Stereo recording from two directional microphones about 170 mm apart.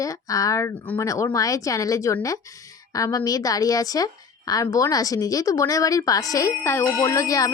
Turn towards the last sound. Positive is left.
turn(degrees=20)  # may be behind; listen again after turning